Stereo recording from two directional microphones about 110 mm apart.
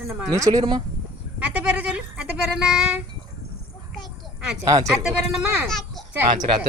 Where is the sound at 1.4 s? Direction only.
10° right (ahead or behind).